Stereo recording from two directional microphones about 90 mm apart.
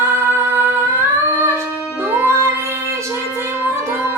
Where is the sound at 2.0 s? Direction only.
25° right (ahead or behind).